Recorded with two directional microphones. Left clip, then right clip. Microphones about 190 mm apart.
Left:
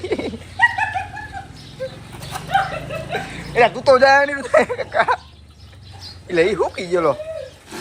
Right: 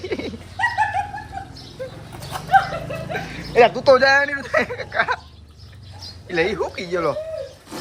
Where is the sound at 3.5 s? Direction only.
20° right (ahead or behind).